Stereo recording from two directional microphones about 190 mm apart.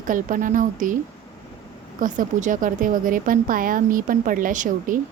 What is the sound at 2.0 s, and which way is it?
A woman's voice, 45° right (ahead or behind).